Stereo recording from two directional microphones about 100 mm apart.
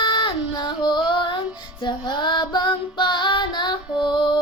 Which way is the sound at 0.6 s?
50° left (ahead or behind).